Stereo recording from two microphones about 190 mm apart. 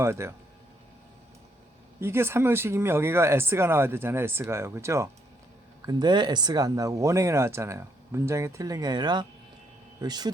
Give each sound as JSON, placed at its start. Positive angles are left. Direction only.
{"t": 0.0, "sound": "speech", "side_deg": -15}
{"t": 2.0, "sound": "speech", "side_deg": -15}